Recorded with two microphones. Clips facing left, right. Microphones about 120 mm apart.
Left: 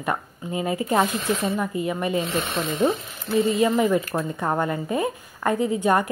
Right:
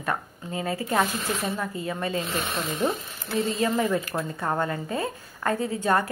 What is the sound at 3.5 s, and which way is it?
A woman's voice, 15° left (ahead or behind).